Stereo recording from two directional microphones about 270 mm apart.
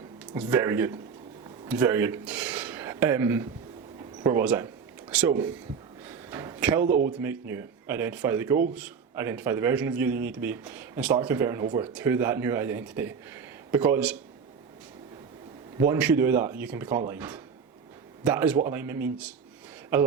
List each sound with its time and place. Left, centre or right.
0.3 s speech: centre
4.2 s a sound: centre
6.8 s speech: right
7.1 s speech: centre
15.8 s speech: centre